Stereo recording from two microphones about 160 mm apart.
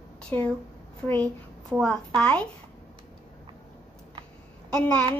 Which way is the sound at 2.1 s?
5° left (ahead or behind).